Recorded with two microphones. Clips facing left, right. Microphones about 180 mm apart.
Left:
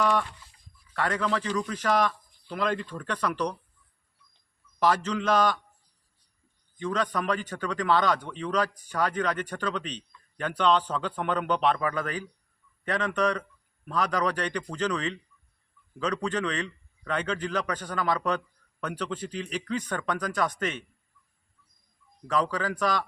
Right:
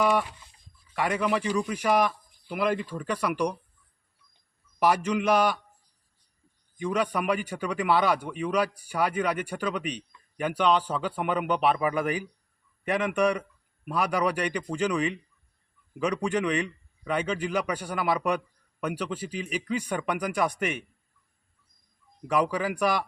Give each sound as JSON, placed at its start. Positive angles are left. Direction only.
{"t": 0.0, "sound": "speech", "side_deg": -10}
{"t": 4.8, "sound": "speech", "side_deg": -10}
{"t": 6.7, "sound": "speech", "side_deg": -10}
{"t": 22.3, "sound": "speech", "side_deg": -10}